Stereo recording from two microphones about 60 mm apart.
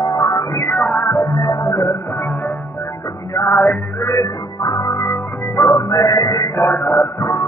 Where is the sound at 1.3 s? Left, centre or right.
Left.